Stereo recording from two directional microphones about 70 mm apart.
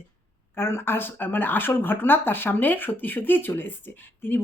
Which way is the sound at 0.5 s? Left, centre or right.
Left.